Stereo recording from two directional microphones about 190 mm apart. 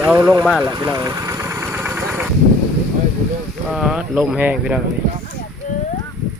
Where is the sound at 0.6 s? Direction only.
20° right (ahead or behind).